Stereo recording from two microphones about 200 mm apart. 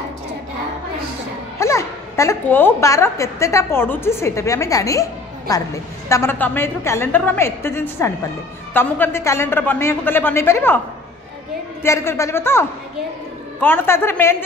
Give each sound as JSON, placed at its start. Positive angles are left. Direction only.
{"t": 1.6, "sound": "a woman's voice", "side_deg": 15}
{"t": 11.8, "sound": "a woman's voice", "side_deg": 15}